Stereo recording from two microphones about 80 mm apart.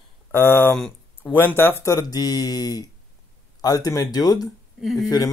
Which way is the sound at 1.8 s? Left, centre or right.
Left.